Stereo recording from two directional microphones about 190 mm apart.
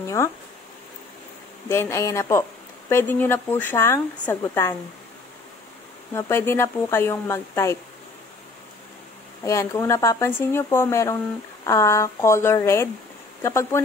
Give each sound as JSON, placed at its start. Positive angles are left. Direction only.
{"t": 1.7, "sound": "speech", "side_deg": 15}
{"t": 6.1, "sound": "speech", "side_deg": 15}
{"t": 9.4, "sound": "speech", "side_deg": 15}